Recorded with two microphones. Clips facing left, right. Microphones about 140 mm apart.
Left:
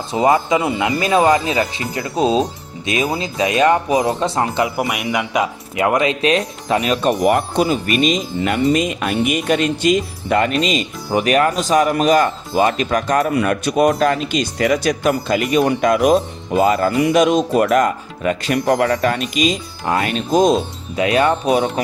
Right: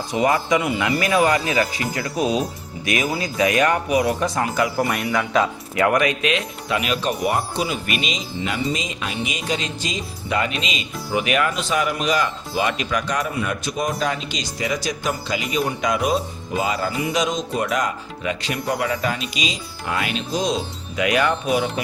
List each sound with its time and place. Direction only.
0.1 s speech: 25° left (ahead or behind)
6.3 s speech: 40° left (ahead or behind)
7.1 s speech: 55° left (ahead or behind)
7.7 s speech: 40° left (ahead or behind)
20.9 s speech: 30° left (ahead or behind)